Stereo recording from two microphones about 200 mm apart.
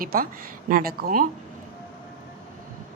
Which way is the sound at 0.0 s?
45° right (ahead or behind).